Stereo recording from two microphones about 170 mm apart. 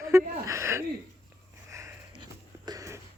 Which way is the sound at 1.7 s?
15° right (ahead or behind).